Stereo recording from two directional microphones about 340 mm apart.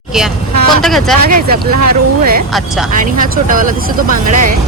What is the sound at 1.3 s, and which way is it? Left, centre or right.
Speech, right.